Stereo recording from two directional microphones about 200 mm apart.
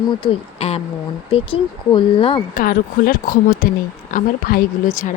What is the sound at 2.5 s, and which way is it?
Speech, 45° left (ahead or behind).